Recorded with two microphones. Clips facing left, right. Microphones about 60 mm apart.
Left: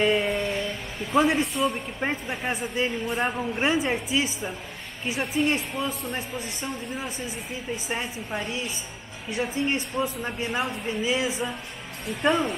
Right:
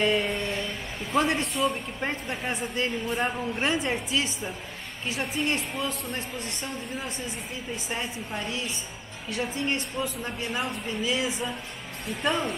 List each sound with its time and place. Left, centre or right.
0.0 s a sound: centre
2.0 s a woman's voice: centre
12.2 s speech: centre